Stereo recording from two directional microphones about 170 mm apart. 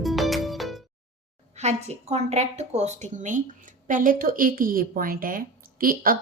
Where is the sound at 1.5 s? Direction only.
40° right (ahead or behind).